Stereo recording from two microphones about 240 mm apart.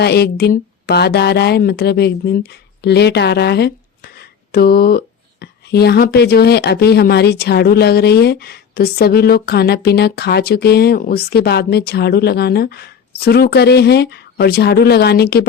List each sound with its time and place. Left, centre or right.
0.0 s speech: left